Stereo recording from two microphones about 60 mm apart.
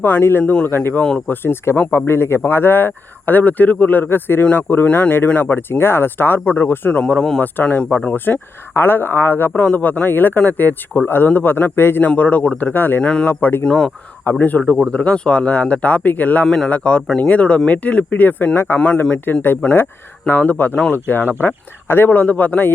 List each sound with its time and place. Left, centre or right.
0.0 s speech: left
7.0 s speech: centre
12.7 s speech: left
13.0 s speech: centre
13.2 s speech: left
13.7 s speech: centre
14.3 s speech: left